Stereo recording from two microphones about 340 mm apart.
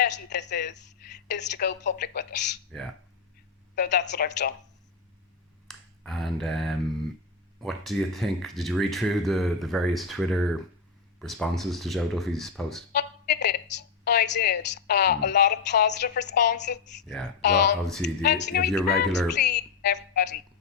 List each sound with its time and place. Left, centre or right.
0.0 s a woman's voice: left
3.8 s a woman's voice: left
5.6 s finger snapping: centre
7.6 s speech: centre
12.9 s a woman's voice: left
17.8 s speech: centre
18.2 s a woman's voice: left
18.7 s speech: centre
19.4 s speech: left